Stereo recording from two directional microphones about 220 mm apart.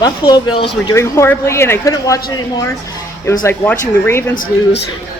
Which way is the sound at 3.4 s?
10° left (ahead or behind).